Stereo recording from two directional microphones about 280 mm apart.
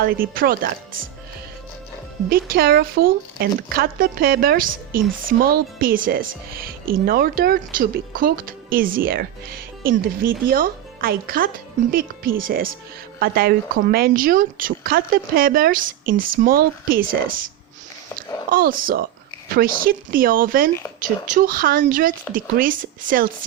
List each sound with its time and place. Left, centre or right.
0.0 s speech: right
2.3 s speech: right
18.5 s speech: right